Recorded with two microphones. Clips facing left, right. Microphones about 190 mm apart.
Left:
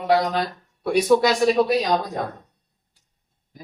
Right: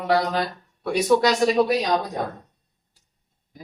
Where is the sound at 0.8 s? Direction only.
10° left (ahead or behind).